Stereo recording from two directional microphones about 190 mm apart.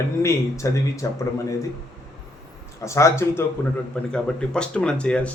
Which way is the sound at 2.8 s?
15° left (ahead or behind).